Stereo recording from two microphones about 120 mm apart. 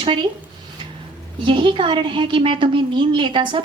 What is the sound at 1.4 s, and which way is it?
A woman's voice, 45° right (ahead or behind).